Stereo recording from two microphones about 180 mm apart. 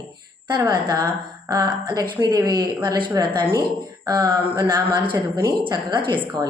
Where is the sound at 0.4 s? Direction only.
25° right (ahead or behind).